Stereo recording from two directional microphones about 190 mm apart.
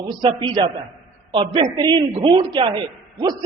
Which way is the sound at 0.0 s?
25° right (ahead or behind).